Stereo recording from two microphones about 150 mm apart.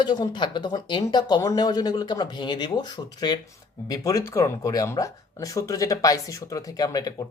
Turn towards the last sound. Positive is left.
turn(degrees=25)  # may be behind; listen again after turning